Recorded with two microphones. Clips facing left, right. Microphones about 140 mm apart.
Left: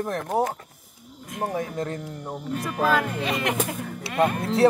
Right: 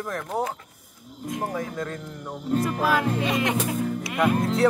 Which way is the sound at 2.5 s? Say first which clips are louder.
Right 7 dB; 35° right (ahead or behind).